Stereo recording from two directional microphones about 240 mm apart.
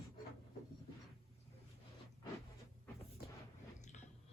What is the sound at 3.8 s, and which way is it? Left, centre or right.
Squish, left.